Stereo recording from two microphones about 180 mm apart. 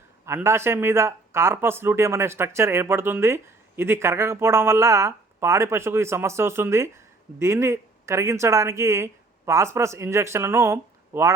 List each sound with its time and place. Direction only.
0.3 s speech: 15° right (ahead or behind)